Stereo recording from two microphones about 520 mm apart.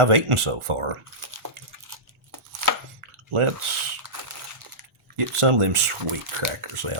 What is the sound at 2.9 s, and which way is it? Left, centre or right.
Drip, right.